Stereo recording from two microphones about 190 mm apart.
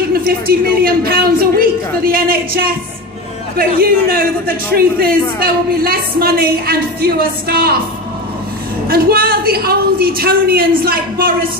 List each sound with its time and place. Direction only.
0.7 s a man's voice: 55° right (ahead or behind)
8.8 s a man's voice: 55° right (ahead or behind)